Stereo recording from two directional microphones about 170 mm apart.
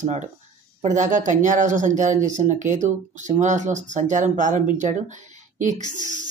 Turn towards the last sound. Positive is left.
turn(degrees=-45)  # may be behind; listen again after turning